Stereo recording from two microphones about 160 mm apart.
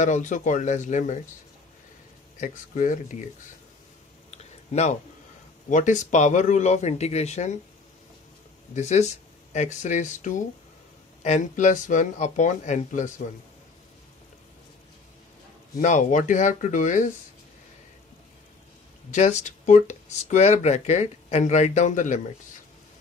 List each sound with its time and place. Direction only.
0.0 s speech: 50° left (ahead or behind)
2.4 s speech: 50° left (ahead or behind)
4.4 s a sound: 45° left (ahead or behind)
5.7 s speech: 50° left (ahead or behind)
8.7 s speech: 45° left (ahead or behind)
15.8 s speech: 50° left (ahead or behind)
19.0 s speech: 45° left (ahead or behind)